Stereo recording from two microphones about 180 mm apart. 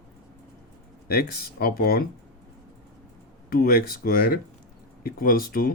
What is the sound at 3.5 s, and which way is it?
Speech, 55° left (ahead or behind).